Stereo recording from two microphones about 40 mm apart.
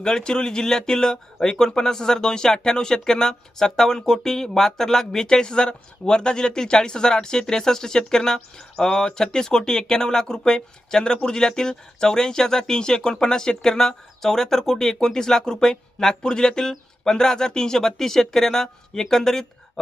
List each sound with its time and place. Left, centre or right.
0.0 s speech: centre